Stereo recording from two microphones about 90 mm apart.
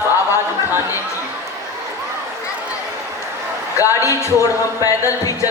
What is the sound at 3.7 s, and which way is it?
A man's voice, 35° left (ahead or behind).